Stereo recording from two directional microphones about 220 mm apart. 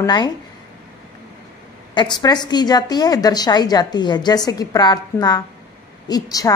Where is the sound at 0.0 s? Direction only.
20° left (ahead or behind).